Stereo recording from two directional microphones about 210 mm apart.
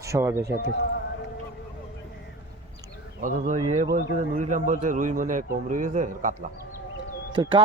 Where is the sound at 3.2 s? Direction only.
40° right (ahead or behind).